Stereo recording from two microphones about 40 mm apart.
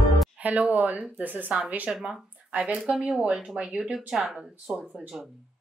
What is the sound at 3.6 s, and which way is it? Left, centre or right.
Speech, right.